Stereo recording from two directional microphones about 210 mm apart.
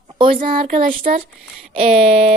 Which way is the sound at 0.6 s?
40° right (ahead or behind).